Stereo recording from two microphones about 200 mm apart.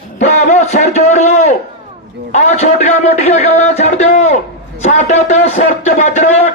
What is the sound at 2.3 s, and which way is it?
A man's voice, 35° left (ahead or behind).